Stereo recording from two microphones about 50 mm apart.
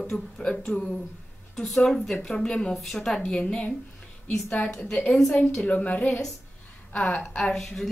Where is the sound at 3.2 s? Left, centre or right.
Left.